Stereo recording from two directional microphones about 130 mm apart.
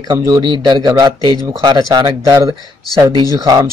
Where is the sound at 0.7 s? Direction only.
30° right (ahead or behind).